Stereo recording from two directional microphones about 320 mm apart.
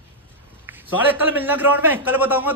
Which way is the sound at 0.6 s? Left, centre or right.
Centre.